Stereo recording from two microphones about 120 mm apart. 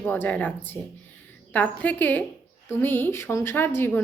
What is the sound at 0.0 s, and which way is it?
Speech, 15° left (ahead or behind).